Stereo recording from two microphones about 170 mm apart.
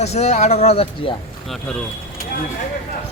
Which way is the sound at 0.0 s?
40° left (ahead or behind).